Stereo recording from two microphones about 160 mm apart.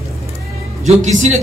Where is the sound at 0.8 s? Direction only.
45° right (ahead or behind).